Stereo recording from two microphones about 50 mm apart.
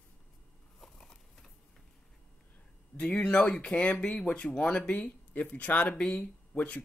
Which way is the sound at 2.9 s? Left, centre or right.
Left.